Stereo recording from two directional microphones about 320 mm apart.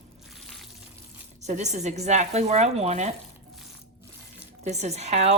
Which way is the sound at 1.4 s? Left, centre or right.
Right.